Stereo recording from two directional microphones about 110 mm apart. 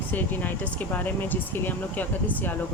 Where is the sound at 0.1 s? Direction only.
15° left (ahead or behind).